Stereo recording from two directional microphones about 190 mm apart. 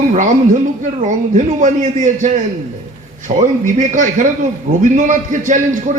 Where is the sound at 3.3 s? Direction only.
35° right (ahead or behind).